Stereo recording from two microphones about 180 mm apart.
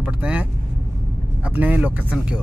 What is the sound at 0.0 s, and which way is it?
Vehicle, 5° right (ahead or behind).